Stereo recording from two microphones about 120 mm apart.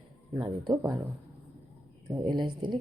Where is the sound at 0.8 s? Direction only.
30° right (ahead or behind).